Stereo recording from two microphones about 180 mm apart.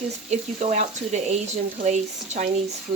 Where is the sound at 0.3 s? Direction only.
40° right (ahead or behind).